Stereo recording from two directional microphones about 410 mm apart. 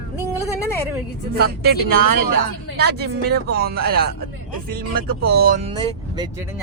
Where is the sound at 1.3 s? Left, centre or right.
Right.